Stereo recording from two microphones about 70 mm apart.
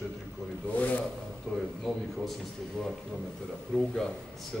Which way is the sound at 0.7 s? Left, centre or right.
Left.